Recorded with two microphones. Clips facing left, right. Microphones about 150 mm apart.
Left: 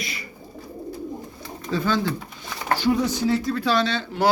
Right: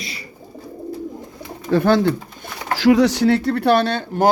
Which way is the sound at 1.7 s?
60° right (ahead or behind).